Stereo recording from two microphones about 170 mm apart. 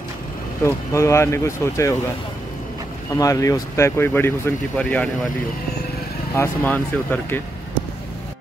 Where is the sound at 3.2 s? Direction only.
20° left (ahead or behind).